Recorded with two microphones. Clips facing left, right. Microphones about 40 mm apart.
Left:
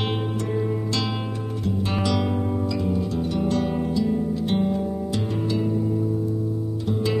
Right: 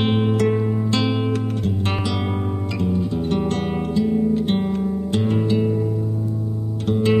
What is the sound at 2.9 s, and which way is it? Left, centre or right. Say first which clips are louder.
Music: right 3 dB; centre.